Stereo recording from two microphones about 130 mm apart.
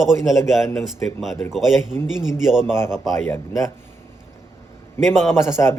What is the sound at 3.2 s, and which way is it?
Speech, 20° left (ahead or behind).